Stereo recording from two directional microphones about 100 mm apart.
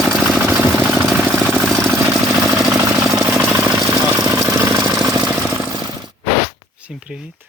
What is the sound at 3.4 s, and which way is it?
Jackhammer, 20° right (ahead or behind).